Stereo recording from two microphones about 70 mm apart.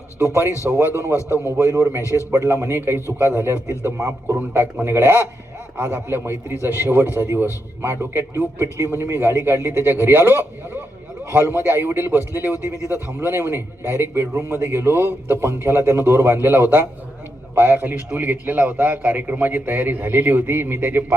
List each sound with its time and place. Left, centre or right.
0.4 s a man's voice: left
1.5 s a man's voice: right
2.0 s a man's voice: left
2.5 s a man's voice: right